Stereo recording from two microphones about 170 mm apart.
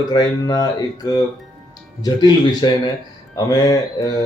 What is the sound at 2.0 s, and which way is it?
Speech, 25° left (ahead or behind).